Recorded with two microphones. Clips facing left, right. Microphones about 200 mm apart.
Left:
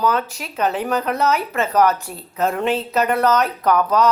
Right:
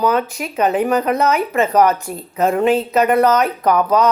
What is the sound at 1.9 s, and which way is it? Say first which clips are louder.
Speech: right 6 dB; 45° right (ahead or behind).